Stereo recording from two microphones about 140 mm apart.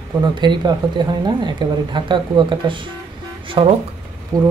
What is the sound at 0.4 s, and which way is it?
A woman's voice, 35° right (ahead or behind).